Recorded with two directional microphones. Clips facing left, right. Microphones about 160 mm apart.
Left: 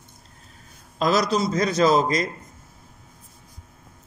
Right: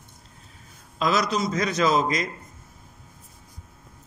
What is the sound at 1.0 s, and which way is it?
A man's voice, 35° left (ahead or behind).